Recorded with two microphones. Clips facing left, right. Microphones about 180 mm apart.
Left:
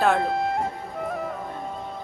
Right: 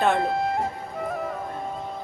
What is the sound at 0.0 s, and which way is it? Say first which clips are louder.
Music: even; centre (ahead or behind).